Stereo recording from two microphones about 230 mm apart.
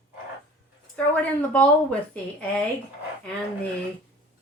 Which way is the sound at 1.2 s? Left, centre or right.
Centre.